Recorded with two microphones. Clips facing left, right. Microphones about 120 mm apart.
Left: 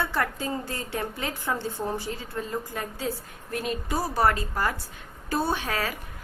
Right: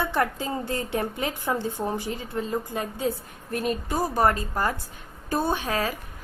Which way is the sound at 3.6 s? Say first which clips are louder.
Right 3 dB; 45° right (ahead or behind).